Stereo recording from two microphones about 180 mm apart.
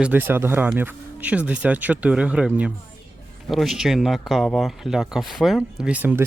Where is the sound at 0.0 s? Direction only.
10° right (ahead or behind).